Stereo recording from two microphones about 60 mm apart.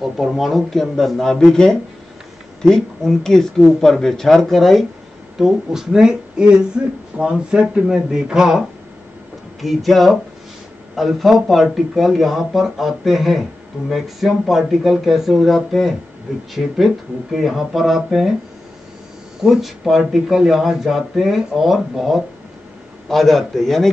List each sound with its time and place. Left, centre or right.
0.2 s speech: centre
5.4 s speech: centre
19.4 s speech: centre